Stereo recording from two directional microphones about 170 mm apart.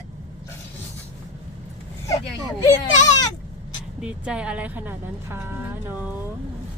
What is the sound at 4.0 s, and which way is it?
A woman's voice, 5° right (ahead or behind).